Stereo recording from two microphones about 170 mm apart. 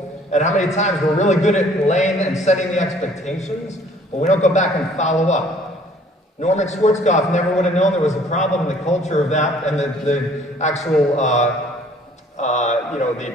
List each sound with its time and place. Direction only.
0.3 s a man's voice: 40° left (ahead or behind)
4.2 s a man's voice: 45° left (ahead or behind)
6.4 s a man's voice: 40° left (ahead or behind)